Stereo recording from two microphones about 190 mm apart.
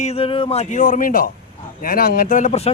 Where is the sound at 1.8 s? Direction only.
50° left (ahead or behind).